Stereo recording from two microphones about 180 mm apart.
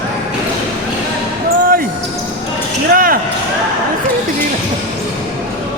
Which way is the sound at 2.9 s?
50° right (ahead or behind).